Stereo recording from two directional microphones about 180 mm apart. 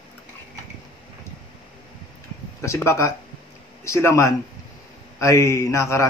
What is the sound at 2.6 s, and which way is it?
A man's voice, 15° left (ahead or behind).